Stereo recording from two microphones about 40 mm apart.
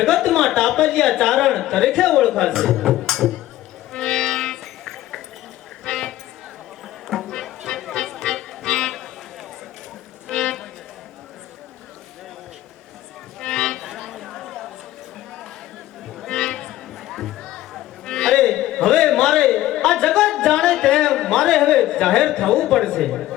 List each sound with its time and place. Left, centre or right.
0.0 s speech: centre
3.1 s music: centre
3.9 s music: centre
5.8 s run: centre
7.1 s music: centre
10.2 s music: centre
13.4 s a sound: centre
13.8 s a sound: centre
16.2 s music: centre